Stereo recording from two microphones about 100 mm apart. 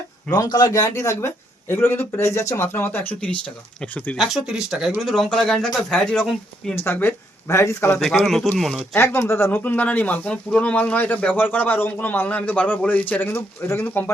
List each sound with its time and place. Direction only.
0.3 s speech: 40° left (ahead or behind); by 4.2 s 15° left (ahead or behind)
4.2 s speech: centre (ahead or behind)
6.7 s speech: 20° left (ahead or behind)
8.0 s speech: centre (ahead or behind)
9.0 s speech: 25° left (ahead or behind)